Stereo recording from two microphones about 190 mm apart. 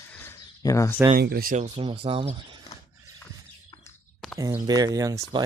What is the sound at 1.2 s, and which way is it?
Speech, 55° right (ahead or behind).